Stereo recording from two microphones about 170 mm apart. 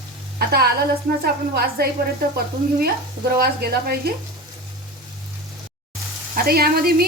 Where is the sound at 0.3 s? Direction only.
65° right (ahead or behind).